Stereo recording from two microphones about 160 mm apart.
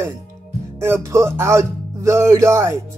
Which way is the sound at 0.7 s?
15° right (ahead or behind).